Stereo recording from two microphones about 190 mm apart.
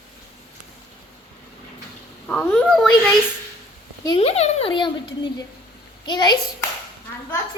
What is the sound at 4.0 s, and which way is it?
A woman's voice, 25° left (ahead or behind).